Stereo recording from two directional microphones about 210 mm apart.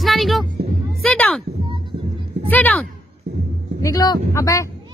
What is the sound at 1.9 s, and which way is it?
Music, 50° right (ahead or behind).